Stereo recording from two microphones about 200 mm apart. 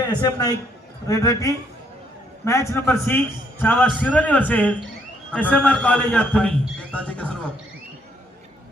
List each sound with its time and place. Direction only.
0.0 s a man's voice: 20° left (ahead or behind)